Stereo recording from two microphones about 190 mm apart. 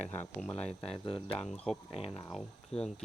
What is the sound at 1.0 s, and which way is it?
Speech, 30° left (ahead or behind).